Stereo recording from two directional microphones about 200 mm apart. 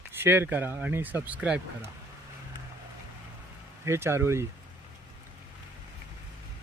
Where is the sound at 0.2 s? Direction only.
10° right (ahead or behind).